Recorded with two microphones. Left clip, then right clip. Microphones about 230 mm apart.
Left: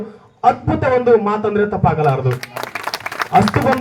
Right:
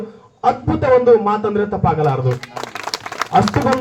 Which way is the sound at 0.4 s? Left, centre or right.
Left.